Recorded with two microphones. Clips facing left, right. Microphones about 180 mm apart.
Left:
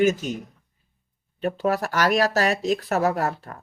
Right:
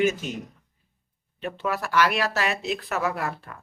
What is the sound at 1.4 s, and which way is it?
Speech, 40° left (ahead or behind).